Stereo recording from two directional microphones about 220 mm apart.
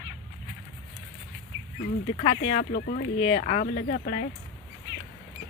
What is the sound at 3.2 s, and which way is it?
Speech, 30° left (ahead or behind).